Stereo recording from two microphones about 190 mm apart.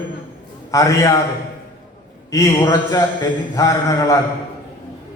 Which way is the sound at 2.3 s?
15° left (ahead or behind).